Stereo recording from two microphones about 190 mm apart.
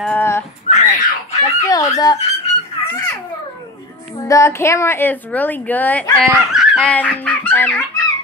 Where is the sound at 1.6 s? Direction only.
20° left (ahead or behind).